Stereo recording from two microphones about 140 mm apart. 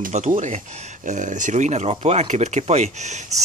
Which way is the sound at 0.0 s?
65° right (ahead or behind).